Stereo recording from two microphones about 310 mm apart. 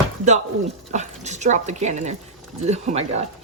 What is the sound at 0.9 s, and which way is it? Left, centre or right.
Speech, right.